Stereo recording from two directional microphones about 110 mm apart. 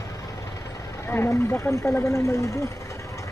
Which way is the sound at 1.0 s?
20° left (ahead or behind).